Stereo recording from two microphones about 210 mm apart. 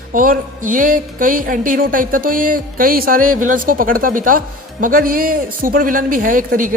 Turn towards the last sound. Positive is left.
turn(degrees=-40)  # may be behind; listen again after turning